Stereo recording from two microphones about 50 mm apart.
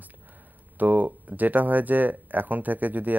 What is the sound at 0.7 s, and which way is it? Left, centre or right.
Speech, right.